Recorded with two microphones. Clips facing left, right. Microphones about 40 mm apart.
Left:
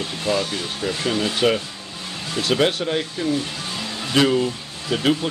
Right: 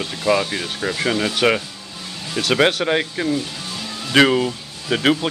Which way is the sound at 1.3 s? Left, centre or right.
Right.